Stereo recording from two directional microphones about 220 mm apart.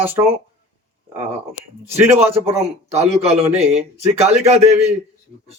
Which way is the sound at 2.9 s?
30° right (ahead or behind).